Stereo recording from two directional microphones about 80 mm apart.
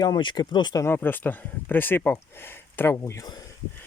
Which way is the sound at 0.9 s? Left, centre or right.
Left.